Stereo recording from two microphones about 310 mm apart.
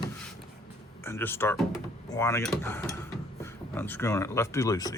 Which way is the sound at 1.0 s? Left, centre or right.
Centre.